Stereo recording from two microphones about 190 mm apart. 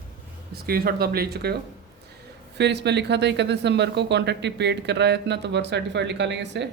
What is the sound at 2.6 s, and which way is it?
Speech, 65° right (ahead or behind).